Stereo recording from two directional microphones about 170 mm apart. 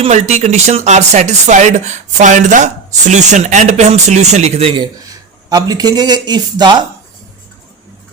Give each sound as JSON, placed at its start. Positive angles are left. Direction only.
{"t": 0.0, "sound": "speech", "side_deg": -40}
{"t": 5.5, "sound": "speech", "side_deg": -20}